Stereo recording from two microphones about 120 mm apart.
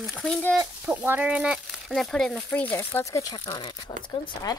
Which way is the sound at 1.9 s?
5° left (ahead or behind).